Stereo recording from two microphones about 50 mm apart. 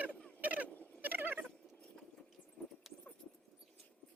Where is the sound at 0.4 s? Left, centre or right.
Right.